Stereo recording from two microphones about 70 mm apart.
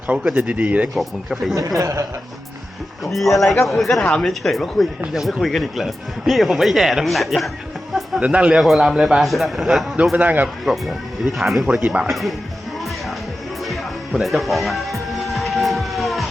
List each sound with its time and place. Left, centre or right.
0.4 s speech: centre
0.9 s speech: centre
1.5 s a man's voice: right
3.0 s speech: centre
8.2 s speech: centre
10.2 s speech: right
10.7 s speech: centre
11.6 s speech: centre
12.0 s speech: centre
13.7 s music: centre